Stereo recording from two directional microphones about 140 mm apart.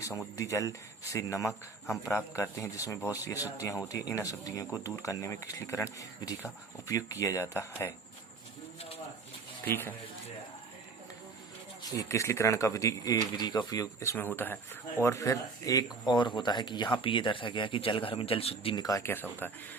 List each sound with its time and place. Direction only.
0.3 s speech: 25° left (ahead or behind)
9.6 s speech: 15° left (ahead or behind)
11.8 s speech: 25° left (ahead or behind); by 18.8 s 45° left (ahead or behind)
18.8 s speech: 25° left (ahead or behind)